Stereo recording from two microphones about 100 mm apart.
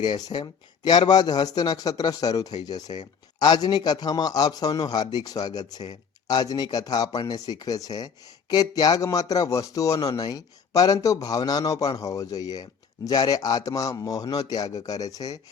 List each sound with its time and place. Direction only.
0.0 s a man's voice: 45° left (ahead or behind)